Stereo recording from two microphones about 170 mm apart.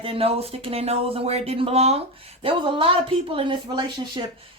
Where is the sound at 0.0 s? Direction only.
35° right (ahead or behind).